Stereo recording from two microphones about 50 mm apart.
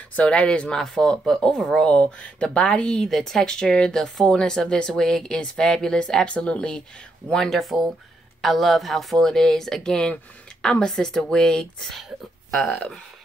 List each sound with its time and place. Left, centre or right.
0.2 s speech: centre
3.1 s speech: centre
7.5 s speech: centre